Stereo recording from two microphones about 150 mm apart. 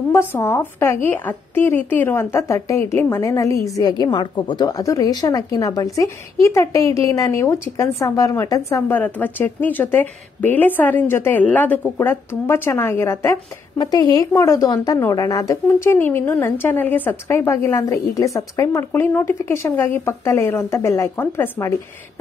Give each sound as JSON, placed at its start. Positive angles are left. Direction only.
{"t": 0.1, "sound": "a woman's voice", "side_deg": 15}